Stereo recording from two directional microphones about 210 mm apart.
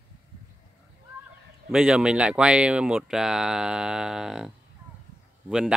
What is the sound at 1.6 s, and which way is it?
Speech, 5° right (ahead or behind).